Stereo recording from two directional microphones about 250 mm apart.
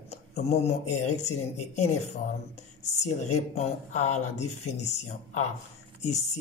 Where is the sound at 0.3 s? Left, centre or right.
Left.